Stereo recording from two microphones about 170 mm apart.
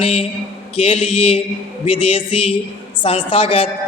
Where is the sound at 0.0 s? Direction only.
35° left (ahead or behind).